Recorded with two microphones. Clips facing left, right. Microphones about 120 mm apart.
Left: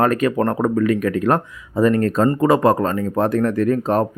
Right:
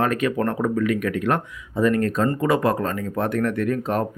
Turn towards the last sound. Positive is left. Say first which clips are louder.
# left 5 dB
turn(degrees=35)  # may be behind; listen again after turning